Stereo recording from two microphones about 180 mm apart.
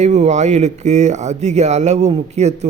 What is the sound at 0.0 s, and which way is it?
Speech, 40° right (ahead or behind).